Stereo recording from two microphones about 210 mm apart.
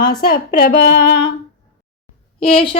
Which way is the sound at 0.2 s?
50° left (ahead or behind).